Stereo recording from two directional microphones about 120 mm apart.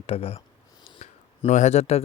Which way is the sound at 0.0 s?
55° left (ahead or behind).